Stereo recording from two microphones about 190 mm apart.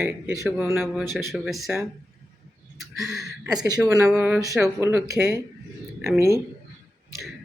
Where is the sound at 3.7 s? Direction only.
15° right (ahead or behind).